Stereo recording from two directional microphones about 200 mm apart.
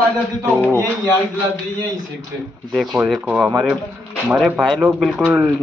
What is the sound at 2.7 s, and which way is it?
Speech, centre (ahead or behind).